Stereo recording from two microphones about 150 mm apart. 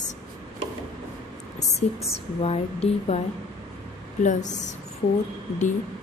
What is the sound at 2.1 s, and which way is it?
A woman's voice, 40° left (ahead or behind).